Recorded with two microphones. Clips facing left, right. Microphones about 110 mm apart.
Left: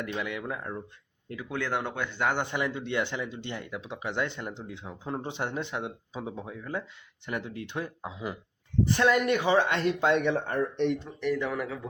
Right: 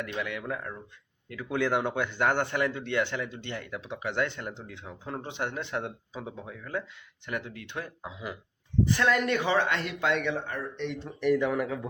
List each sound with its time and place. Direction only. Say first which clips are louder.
0.0 s speech: left 1 dB; 25° left (ahead or behind)
1.5 s speech: right 4 dB; 5° right (ahead or behind)
2.4 s speech: right 2 dB; 20° left (ahead or behind)
9.0 s speech: left 5 dB; 15° left (ahead or behind)
10.3 s speech: left 6 dB; 45° left (ahead or behind)
11.2 s a man's voice: right 7 dB; 10° right (ahead or behind)